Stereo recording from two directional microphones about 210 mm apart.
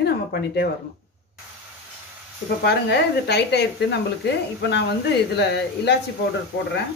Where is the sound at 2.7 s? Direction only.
50° left (ahead or behind).